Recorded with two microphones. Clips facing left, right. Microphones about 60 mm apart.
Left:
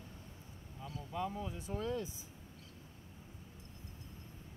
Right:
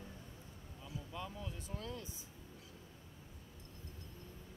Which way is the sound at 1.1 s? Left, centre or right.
Left.